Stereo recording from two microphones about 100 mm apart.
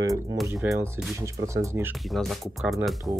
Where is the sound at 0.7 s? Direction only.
25° right (ahead or behind).